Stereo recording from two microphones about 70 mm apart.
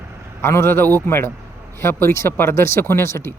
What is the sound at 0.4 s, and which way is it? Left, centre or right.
Speech, left.